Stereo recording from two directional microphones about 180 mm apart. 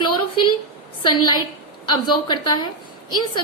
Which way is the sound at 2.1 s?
25° left (ahead or behind).